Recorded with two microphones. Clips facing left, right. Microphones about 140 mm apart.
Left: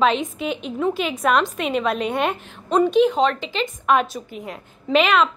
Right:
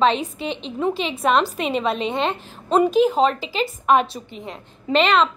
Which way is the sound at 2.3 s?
25° right (ahead or behind).